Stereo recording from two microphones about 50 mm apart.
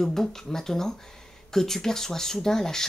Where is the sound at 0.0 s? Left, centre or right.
Centre.